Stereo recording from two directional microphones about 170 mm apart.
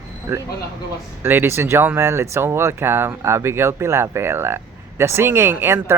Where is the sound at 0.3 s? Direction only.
15° right (ahead or behind).